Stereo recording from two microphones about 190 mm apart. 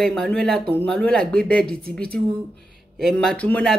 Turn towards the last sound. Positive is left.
turn(degrees=5)  # may be behind; listen again after turning